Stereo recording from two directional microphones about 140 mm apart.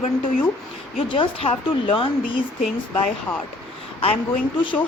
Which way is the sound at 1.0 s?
40° left (ahead or behind).